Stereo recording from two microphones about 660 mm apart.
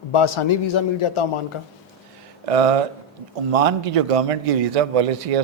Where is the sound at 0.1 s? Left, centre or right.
Left.